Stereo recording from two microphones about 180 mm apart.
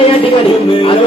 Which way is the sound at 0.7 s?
30° left (ahead or behind).